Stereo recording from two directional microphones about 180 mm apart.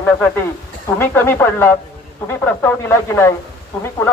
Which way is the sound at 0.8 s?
15° left (ahead or behind).